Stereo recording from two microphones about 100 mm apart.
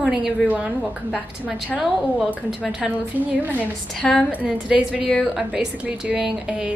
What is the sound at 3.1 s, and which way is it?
A woman's voice, 20° right (ahead or behind).